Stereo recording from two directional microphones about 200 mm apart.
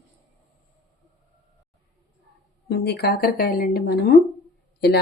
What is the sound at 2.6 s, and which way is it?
A woman's voice, 55° left (ahead or behind).